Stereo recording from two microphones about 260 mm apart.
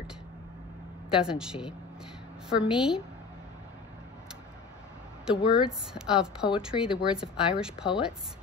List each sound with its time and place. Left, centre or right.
1.2 s speech: centre
5.2 s speech: centre